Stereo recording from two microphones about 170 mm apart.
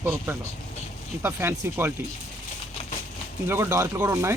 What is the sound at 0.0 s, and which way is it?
Speech, 10° right (ahead or behind).